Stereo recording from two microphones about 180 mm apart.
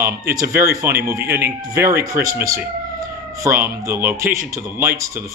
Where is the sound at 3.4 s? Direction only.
15° right (ahead or behind).